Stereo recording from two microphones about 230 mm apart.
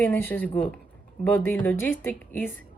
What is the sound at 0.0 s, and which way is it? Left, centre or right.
A woman's voice, centre.